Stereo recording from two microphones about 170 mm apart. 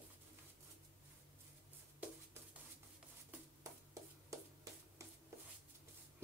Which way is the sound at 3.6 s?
20° right (ahead or behind).